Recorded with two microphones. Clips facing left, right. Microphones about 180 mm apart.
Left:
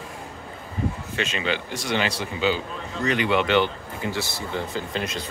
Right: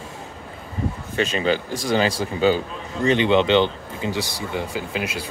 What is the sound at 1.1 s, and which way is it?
Speech, 40° right (ahead or behind).